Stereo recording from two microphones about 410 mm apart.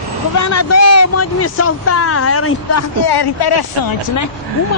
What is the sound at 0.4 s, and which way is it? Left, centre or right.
Speech, left.